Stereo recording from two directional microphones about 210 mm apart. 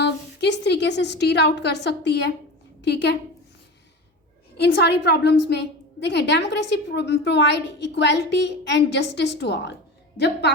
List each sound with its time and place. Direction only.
0.0 s a woman's voice: 55° left (ahead or behind)
4.5 s a woman's voice: 55° left (ahead or behind)